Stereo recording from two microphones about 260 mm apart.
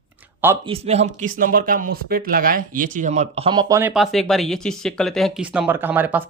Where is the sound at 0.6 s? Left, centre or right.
Right.